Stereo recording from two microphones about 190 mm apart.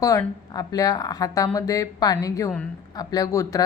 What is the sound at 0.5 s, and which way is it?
A woman's voice, 20° left (ahead or behind).